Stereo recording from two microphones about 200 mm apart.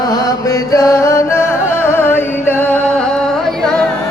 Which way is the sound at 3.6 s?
Centre (ahead or behind).